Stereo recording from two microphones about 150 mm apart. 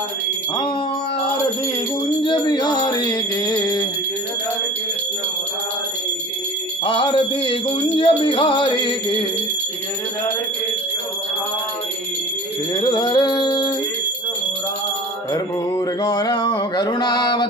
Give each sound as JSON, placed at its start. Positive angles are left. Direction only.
{"t": 2.2, "sound": "music", "side_deg": 30}
{"t": 6.8, "sound": "a sound", "side_deg": 35}
{"t": 8.0, "sound": "music", "side_deg": 35}
{"t": 12.8, "sound": "music", "side_deg": 25}
{"t": 15.3, "sound": "mantra", "side_deg": 25}